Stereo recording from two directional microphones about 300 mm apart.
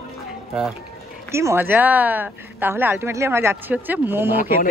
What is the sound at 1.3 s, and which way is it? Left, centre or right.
A woman's voice, centre.